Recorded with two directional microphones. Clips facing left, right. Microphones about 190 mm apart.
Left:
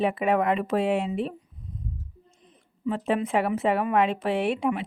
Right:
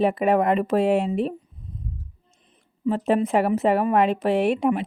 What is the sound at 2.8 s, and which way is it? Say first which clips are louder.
A woman's voice: right 5 dB; 35° right (ahead or behind).